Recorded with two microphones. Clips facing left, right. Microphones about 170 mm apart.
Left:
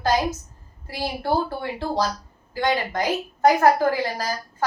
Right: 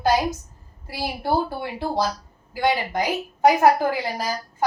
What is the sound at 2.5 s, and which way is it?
A woman's voice, 10° right (ahead or behind).